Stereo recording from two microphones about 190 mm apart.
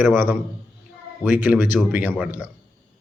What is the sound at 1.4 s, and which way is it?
Speech, 10° right (ahead or behind).